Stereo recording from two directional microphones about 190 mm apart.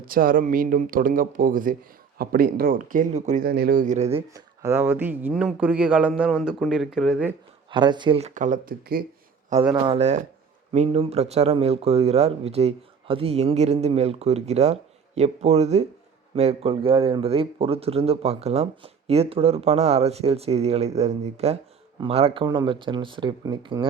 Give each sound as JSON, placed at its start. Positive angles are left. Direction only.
{"t": 0.0, "sound": "speech", "side_deg": -50}
{"t": 3.4, "sound": "speech", "side_deg": -55}
{"t": 4.4, "sound": "speech", "side_deg": -15}
{"t": 7.7, "sound": "speech", "side_deg": -25}
{"t": 8.3, "sound": "speech", "side_deg": -40}
{"t": 9.6, "sound": "speech", "side_deg": -25}